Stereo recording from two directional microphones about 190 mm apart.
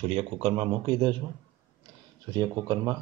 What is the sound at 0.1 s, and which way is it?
Speech, 30° right (ahead or behind).